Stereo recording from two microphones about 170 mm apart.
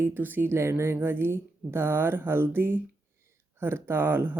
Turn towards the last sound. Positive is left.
turn(degrees=-15)  # may be behind; listen again after turning